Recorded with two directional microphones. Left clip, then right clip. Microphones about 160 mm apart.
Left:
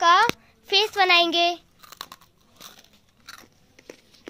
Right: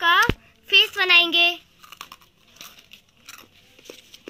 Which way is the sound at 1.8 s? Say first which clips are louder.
Even; 20° left (ahead or behind).